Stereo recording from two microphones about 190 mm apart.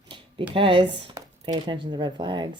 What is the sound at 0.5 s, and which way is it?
Speech, 30° right (ahead or behind).